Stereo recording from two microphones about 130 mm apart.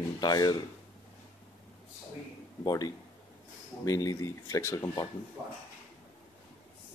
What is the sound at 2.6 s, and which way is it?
Speech, 30° left (ahead or behind).